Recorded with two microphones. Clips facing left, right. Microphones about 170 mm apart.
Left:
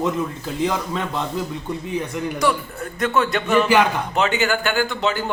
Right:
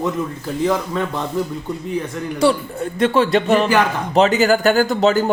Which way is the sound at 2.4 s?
30° right (ahead or behind).